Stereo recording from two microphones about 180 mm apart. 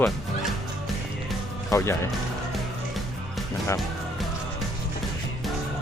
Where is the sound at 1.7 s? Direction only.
15° left (ahead or behind).